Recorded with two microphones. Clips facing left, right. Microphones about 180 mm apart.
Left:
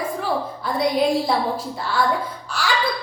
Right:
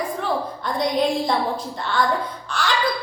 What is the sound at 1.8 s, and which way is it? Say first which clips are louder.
Music: even; 5° left (ahead or behind).